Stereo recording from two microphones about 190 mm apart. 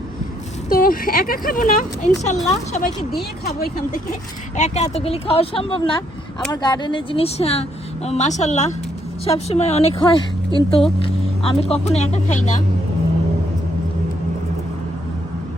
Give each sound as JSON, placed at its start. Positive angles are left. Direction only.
{"t": 0.7, "sound": "speech", "side_deg": 50}
{"t": 3.4, "sound": "speech", "side_deg": 50}
{"t": 4.5, "sound": "speech", "side_deg": 35}